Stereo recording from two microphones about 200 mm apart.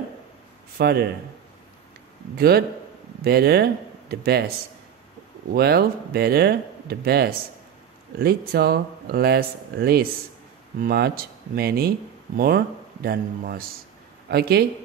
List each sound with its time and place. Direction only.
0.7 s speech: 55° right (ahead or behind)
2.3 s speech: 50° right (ahead or behind)
5.5 s speech: 50° right (ahead or behind)